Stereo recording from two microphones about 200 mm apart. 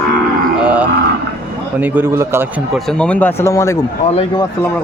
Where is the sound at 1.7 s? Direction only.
10° right (ahead or behind).